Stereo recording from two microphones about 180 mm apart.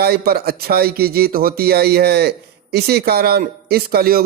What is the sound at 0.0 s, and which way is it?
Speech, 60° right (ahead or behind).